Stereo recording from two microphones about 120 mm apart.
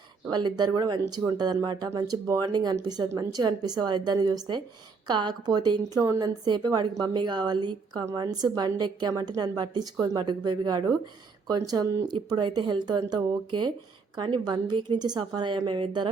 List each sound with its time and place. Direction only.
0.3 s a woman's voice: 35° right (ahead or behind)